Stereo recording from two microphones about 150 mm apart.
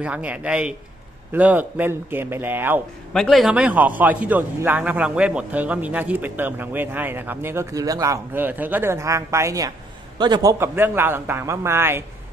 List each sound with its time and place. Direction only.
0.0 s a man's voice: 10° right (ahead or behind)
3.1 s a man's voice: centre (ahead or behind); by 8.2 s 20° right (ahead or behind)
8.3 s a man's voice: 10° right (ahead or behind); by 10.5 s 30° right (ahead or behind)
10.6 s a man's voice: 15° right (ahead or behind)